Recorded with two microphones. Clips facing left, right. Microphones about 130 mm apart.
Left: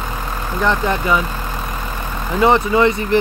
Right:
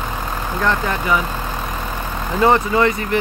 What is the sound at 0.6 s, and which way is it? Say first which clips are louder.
Speech: left 3 dB; 20° left (ahead or behind).